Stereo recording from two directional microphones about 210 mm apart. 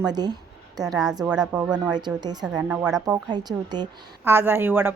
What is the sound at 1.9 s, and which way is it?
A woman's voice, 20° right (ahead or behind).